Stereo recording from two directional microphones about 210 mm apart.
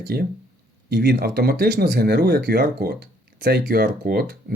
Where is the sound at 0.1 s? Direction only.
50° right (ahead or behind).